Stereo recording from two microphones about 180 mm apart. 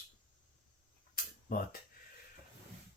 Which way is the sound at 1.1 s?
55° left (ahead or behind).